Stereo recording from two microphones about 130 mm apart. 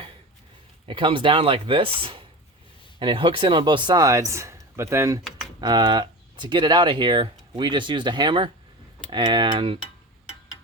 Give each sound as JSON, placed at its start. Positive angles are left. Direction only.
{"t": 0.9, "sound": "speech", "side_deg": -40}
{"t": 5.5, "sound": "speech", "side_deg": -35}